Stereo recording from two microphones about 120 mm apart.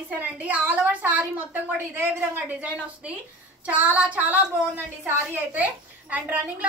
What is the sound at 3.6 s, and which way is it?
A woman's voice, 10° right (ahead or behind).